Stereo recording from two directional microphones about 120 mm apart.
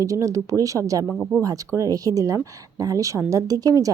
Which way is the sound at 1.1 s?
5° right (ahead or behind).